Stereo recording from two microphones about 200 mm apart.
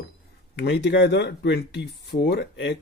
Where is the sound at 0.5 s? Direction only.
60° left (ahead or behind).